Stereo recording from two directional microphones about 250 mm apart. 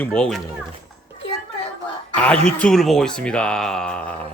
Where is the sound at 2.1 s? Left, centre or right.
Centre.